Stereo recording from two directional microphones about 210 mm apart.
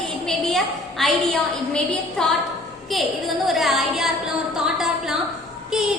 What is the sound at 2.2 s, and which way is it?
Speech, 5° left (ahead or behind).